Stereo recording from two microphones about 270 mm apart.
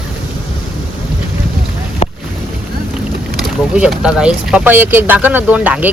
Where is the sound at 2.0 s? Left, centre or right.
Left.